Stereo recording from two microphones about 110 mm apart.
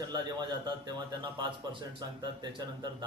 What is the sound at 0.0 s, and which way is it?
A man's voice, 40° right (ahead or behind).